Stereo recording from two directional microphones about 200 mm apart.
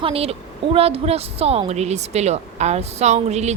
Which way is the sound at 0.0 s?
30° right (ahead or behind).